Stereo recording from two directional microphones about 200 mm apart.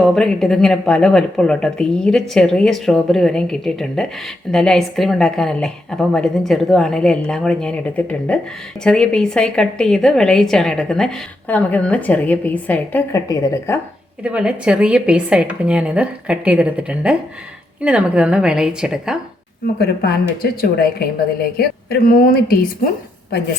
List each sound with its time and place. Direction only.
0.0 s a woman's voice: centre (ahead or behind)
14.3 s a woman's voice: 5° right (ahead or behind)
19.8 s speech: 50° left (ahead or behind)